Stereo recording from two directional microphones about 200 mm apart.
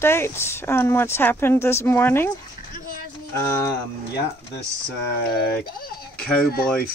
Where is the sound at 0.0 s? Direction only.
10° left (ahead or behind).